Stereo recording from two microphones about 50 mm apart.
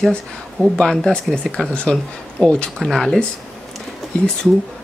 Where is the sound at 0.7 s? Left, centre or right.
Centre.